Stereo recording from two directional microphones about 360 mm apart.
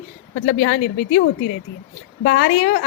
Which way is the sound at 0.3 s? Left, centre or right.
Left.